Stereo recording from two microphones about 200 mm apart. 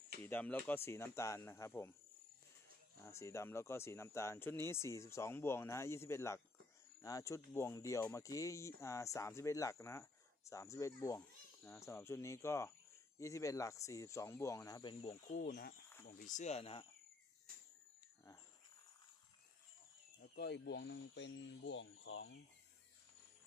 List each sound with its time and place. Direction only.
0.2 s speech: 10° left (ahead or behind)
3.0 s speech: 15° left (ahead or behind); by 16.8 s 30° left (ahead or behind)
20.2 s speech: 55° left (ahead or behind); by 22.4 s 70° left (ahead or behind)